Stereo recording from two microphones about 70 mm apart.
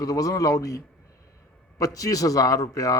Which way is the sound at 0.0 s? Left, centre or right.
Left.